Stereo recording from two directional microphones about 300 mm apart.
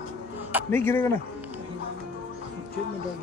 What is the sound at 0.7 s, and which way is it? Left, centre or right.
Speech, centre.